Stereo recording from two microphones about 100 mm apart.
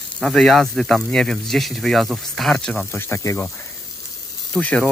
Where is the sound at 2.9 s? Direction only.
25° left (ahead or behind).